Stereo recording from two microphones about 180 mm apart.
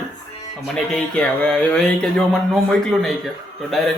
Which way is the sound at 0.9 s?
5° left (ahead or behind).